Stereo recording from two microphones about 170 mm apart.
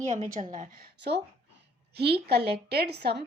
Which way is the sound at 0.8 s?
75° right (ahead or behind).